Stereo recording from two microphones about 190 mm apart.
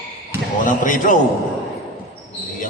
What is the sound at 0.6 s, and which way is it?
Speech, 45° left (ahead or behind).